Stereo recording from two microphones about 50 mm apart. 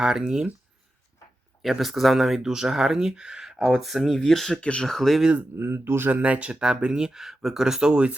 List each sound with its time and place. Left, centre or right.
0.0 s speech: centre
1.8 s speech: centre
4.2 s speech: centre
4.6 s speech: left
4.9 s speech: centre
5.5 s speech: right
6.2 s speech: right